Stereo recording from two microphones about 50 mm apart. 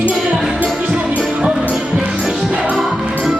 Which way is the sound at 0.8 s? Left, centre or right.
Centre.